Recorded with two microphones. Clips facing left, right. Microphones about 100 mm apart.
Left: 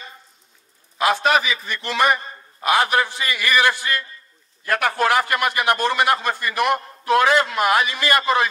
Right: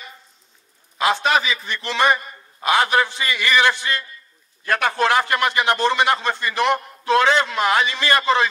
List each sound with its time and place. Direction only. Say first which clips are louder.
0.9 s a man's voice: left 1 dB; 25° right (ahead or behind)